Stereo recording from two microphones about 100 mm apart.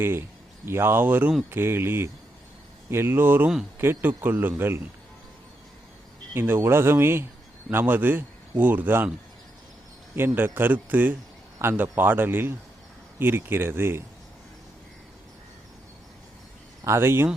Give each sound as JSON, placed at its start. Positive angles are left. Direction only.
{"t": 0.0, "sound": "a man's voice", "side_deg": -25}
{"t": 6.3, "sound": "a man's voice", "side_deg": -25}
{"t": 10.2, "sound": "a man's voice", "side_deg": -20}
{"t": 16.8, "sound": "a man's voice", "side_deg": -25}